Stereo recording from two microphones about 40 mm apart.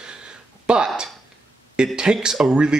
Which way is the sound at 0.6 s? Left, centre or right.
Right.